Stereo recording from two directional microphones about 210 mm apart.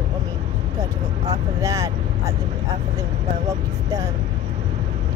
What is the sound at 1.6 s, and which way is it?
Speech, 15° right (ahead or behind).